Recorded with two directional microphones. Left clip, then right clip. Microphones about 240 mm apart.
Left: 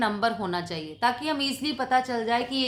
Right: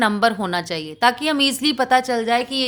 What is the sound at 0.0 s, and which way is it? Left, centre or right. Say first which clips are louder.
A woman's voice: right 8 dB; right.